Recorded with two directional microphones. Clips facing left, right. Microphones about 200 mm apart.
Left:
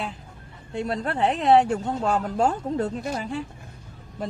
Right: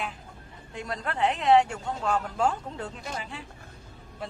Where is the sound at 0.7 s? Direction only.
30° left (ahead or behind).